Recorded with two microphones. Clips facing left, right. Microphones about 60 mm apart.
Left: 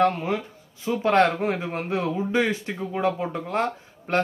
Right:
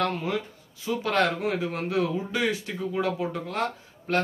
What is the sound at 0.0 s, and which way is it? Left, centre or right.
Speech, left.